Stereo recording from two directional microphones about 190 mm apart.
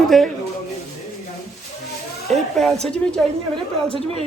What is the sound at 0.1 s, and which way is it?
Speech, centre (ahead or behind).